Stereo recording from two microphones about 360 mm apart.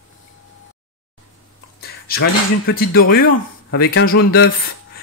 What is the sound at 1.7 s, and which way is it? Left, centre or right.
Speech, left.